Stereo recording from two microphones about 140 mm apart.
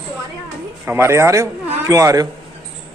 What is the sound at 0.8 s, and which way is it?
A man's voice, 15° right (ahead or behind).